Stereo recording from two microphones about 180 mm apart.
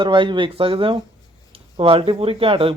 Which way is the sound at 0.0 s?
25° right (ahead or behind).